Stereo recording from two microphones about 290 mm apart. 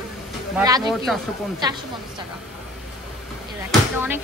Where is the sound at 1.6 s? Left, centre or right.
Centre.